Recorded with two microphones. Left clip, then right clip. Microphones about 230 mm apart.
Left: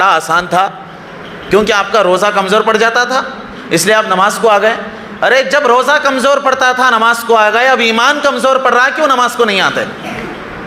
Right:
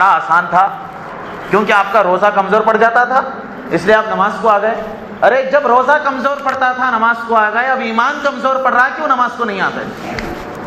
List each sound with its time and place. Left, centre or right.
0.0 s a man's voice: left